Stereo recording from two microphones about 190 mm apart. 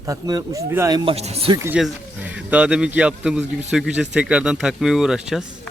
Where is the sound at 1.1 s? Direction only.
30° right (ahead or behind).